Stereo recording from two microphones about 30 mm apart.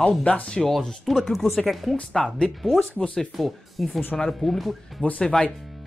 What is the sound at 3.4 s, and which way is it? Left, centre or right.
Speech, centre.